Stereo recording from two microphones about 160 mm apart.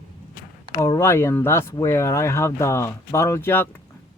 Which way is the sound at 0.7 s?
20° left (ahead or behind).